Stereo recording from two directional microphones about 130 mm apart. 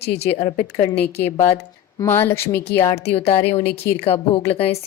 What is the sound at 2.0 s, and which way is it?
Speech, 20° left (ahead or behind).